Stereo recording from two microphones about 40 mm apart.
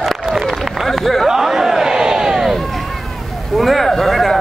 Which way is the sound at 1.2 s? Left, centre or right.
Centre.